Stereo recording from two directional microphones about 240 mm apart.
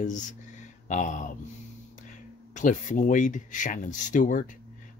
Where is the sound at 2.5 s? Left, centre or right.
Left.